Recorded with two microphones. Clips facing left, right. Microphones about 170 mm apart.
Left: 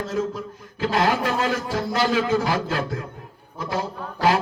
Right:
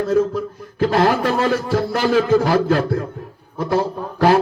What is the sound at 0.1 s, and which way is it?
A man's voice, 40° right (ahead or behind).